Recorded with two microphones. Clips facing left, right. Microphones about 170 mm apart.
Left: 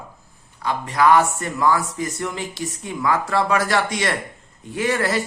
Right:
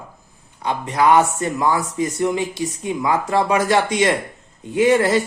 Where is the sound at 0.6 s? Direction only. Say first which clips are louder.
Right 1 dB; 20° right (ahead or behind).